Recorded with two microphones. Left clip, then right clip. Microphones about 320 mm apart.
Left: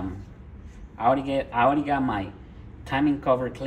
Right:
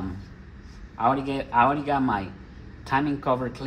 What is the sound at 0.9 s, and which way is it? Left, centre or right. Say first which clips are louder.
Speech: left 1 dB; centre.